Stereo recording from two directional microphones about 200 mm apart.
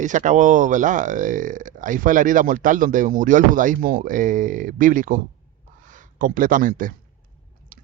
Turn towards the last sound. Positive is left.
turn(degrees=-45)  # may be behind; listen again after turning